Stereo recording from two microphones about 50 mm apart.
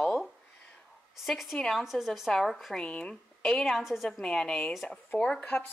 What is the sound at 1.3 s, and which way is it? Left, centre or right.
Speech, centre.